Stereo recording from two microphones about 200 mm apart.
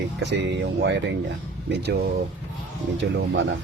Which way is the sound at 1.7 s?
60° right (ahead or behind).